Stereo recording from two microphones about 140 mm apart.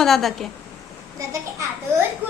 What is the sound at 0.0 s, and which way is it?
Speech, centre (ahead or behind).